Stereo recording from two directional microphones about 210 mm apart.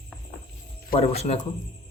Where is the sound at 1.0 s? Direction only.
30° left (ahead or behind).